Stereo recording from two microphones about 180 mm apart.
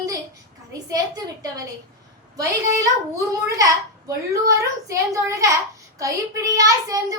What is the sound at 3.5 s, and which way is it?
A child's voice, 20° right (ahead or behind).